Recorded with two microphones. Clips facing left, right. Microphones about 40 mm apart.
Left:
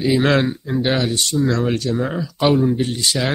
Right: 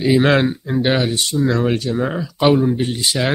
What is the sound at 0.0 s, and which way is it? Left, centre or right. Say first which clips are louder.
Speech: right 2 dB; centre.